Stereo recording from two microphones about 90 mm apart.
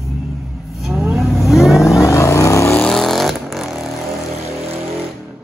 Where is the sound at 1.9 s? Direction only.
35° left (ahead or behind).